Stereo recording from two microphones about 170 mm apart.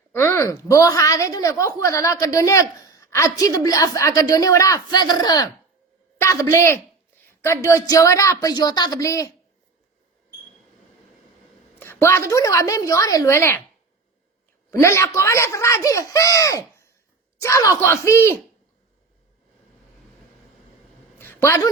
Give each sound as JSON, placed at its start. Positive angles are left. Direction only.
{"t": 0.1, "sound": "a woman's voice", "side_deg": 15}
{"t": 11.8, "sound": "speech", "side_deg": 15}
{"t": 14.7, "sound": "speech", "side_deg": 15}
{"t": 21.2, "sound": "a sound", "side_deg": 15}